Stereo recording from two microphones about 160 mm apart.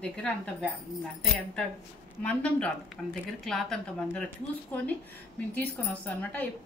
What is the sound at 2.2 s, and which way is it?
A woman's voice, 5° left (ahead or behind).